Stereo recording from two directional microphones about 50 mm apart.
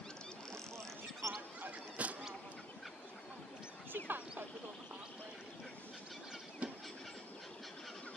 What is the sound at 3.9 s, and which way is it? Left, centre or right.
Fowl, right.